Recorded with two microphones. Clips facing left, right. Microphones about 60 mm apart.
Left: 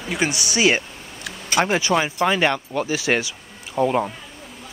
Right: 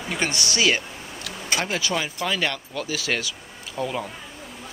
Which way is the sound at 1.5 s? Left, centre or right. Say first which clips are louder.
Left 6 dB; left.